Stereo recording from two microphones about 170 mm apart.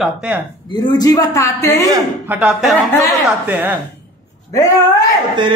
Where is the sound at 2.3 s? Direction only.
5° right (ahead or behind).